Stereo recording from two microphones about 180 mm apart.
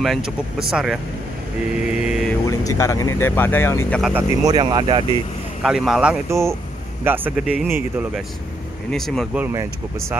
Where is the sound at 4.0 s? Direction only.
5° right (ahead or behind).